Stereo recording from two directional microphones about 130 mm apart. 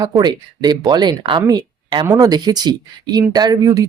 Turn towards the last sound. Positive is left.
turn(degrees=-30)  # may be behind; listen again after turning